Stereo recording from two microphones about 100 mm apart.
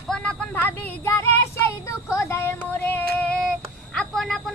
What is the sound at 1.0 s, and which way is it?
Child singing, 25° left (ahead or behind).